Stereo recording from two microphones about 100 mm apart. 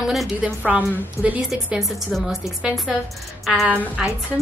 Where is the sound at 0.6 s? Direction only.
15° right (ahead or behind).